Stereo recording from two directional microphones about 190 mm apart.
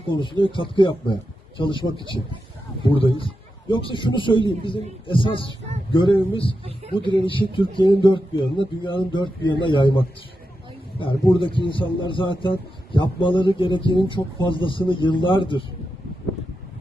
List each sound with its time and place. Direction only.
0.1 s speech: 25° left (ahead or behind)
11.0 s speech: 25° left (ahead or behind)